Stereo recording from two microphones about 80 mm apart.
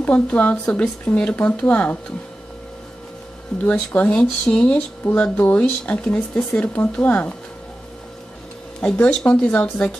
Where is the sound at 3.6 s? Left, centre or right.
Centre.